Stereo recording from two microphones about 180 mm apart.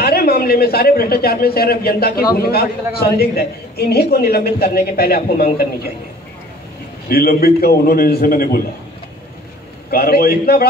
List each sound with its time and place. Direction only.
0.0 s a man's voice: 60° left (ahead or behind)
7.1 s a woman's voice: 60° left (ahead or behind)
9.8 s a woman's voice: 60° left (ahead or behind)